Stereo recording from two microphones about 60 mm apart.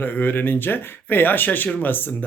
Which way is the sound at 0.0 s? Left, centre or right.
Left.